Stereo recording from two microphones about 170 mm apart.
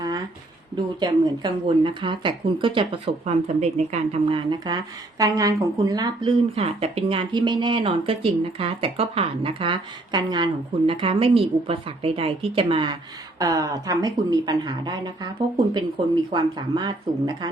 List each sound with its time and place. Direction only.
0.9 s speech: 25° right (ahead or behind)
16.3 s speech: 25° right (ahead or behind)